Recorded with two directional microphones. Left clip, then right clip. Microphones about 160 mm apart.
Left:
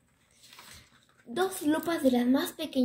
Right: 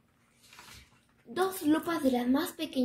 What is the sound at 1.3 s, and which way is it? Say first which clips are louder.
A woman's voice: even; 15° left (ahead or behind).